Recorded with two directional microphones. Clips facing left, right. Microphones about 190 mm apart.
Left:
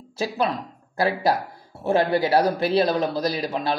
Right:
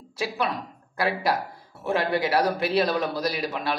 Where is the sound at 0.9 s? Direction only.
25° left (ahead or behind).